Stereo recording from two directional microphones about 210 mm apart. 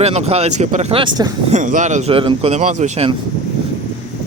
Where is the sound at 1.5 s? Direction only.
35° right (ahead or behind).